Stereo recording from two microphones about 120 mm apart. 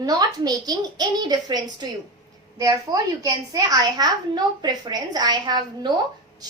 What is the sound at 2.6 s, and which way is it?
A woman's voice, 30° right (ahead or behind).